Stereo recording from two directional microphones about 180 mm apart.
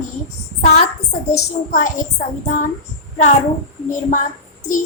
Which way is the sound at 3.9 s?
45° left (ahead or behind).